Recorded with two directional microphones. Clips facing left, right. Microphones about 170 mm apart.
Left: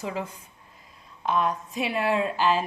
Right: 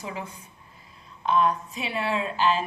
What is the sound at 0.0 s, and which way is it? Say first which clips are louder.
A woman's voice: left 4 dB; 40° left (ahead or behind).